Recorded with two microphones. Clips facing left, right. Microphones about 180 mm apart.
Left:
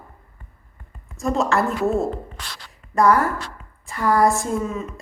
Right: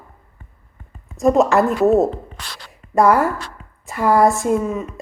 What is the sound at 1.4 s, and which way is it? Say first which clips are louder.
Speech: right 5 dB; 20° right (ahead or behind).